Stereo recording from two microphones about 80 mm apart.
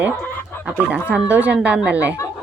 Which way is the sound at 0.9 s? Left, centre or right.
Centre.